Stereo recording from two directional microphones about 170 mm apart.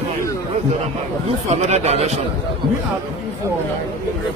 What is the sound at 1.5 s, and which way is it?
Speech, 40° right (ahead or behind).